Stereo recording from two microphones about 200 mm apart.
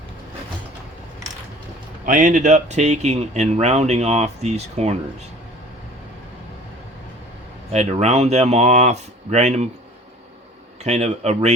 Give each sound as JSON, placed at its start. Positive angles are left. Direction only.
{"t": 2.0, "sound": "speech", "side_deg": -40}
{"t": 7.7, "sound": "speech", "side_deg": -30}
{"t": 10.8, "sound": "speech", "side_deg": -35}